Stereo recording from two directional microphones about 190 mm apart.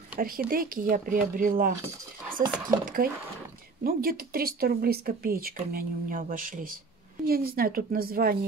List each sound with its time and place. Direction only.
0.2 s speech: 50° right (ahead or behind)
2.8 s speech: 45° right (ahead or behind)